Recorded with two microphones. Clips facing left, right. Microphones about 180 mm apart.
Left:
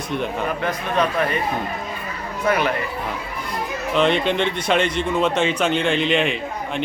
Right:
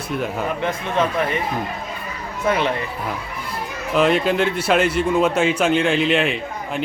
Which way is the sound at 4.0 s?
5° right (ahead or behind).